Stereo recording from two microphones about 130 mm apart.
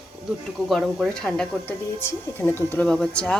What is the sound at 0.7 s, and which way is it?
Speech, centre (ahead or behind).